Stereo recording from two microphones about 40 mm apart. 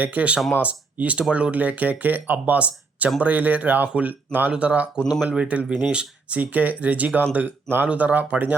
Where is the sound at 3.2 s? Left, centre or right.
Right.